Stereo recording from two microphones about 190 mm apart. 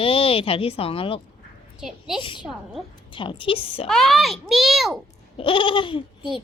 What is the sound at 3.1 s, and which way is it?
Speech, 25° left (ahead or behind).